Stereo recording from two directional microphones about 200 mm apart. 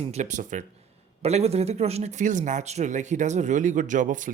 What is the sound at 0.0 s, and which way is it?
Speech, 35° right (ahead or behind).